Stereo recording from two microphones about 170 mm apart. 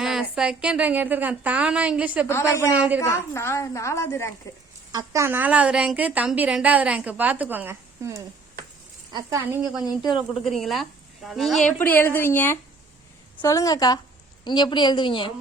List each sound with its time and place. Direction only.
0.0 s a woman's voice: centre (ahead or behind)
2.2 s a woman's voice: 15° left (ahead or behind)
4.9 s a woman's voice: 20° right (ahead or behind)
10.1 s speech: centre (ahead or behind)
11.8 s a woman's voice: 10° left (ahead or behind); by 15.3 s 25° left (ahead or behind)